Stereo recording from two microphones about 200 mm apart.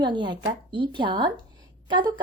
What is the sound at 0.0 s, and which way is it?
A woman's voice, 25° right (ahead or behind).